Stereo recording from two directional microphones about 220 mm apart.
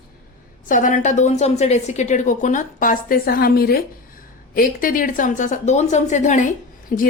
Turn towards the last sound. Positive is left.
turn(degrees=40)  # may be behind; listen again after turning